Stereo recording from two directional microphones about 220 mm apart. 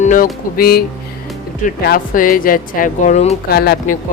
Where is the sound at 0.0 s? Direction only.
35° left (ahead or behind).